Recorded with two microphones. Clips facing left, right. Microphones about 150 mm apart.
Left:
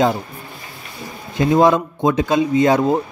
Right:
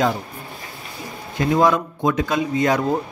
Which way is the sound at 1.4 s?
25° left (ahead or behind).